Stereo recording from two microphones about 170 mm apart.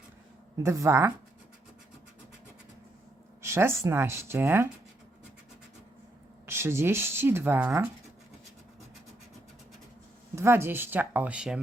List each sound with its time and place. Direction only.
0.5 s speech: 20° right (ahead or behind)
3.4 s speech: 15° right (ahead or behind)
6.4 s speech: 15° right (ahead or behind)
10.3 s speech: 15° right (ahead or behind)